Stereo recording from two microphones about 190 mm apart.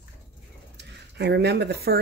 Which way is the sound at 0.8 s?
60° right (ahead or behind).